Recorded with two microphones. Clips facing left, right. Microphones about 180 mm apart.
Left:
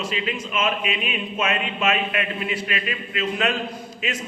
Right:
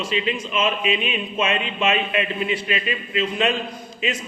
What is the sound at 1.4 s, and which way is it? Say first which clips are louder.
A man's voice: right 2 dB; 30° right (ahead or behind).